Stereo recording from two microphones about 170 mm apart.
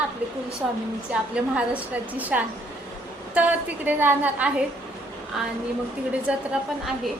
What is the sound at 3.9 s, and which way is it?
Speech, 10° right (ahead or behind).